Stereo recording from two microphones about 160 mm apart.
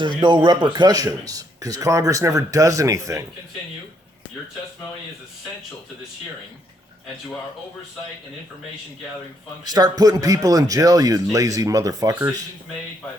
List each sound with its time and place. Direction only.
0.2 s a man's voice: 30° right (ahead or behind)
9.6 s a man's voice: 25° right (ahead or behind)